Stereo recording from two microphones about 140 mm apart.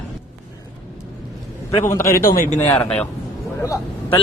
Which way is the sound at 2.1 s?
90° left.